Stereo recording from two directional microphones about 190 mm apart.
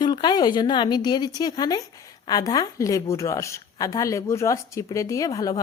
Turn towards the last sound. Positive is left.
turn(degrees=20)  # may be behind; listen again after turning